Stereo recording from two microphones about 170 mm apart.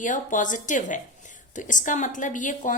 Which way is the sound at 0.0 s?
50° left (ahead or behind).